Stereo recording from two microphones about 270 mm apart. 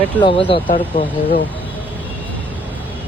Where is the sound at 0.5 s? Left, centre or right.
Centre.